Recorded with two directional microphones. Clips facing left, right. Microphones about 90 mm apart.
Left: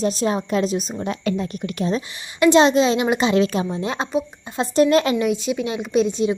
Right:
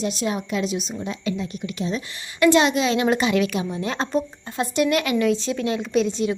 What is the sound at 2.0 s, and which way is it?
A woman's voice, 25° left (ahead or behind).